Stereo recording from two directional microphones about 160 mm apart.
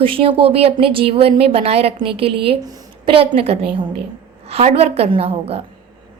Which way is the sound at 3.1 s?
35° right (ahead or behind).